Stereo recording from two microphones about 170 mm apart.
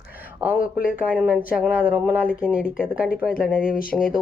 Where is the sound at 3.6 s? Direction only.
55° left (ahead or behind).